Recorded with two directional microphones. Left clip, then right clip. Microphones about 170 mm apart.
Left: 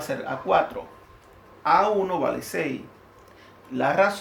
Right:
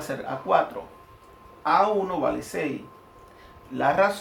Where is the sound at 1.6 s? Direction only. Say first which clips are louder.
Left 1 dB; 30° left (ahead or behind).